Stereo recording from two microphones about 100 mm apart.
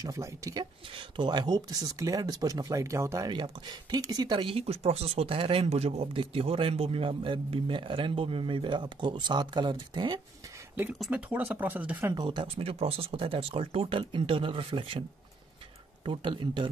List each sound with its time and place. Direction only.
0.0 s speech: 35° right (ahead or behind)
0.9 s speech: 50° right (ahead or behind); by 3.3 s 30° right (ahead or behind)
3.3 s speech: 50° right (ahead or behind)
4.4 s speech: 65° right (ahead or behind); by 10.2 s 45° right (ahead or behind)
10.9 s speech: 10° right (ahead or behind)
12.3 s speech: 70° right (ahead or behind)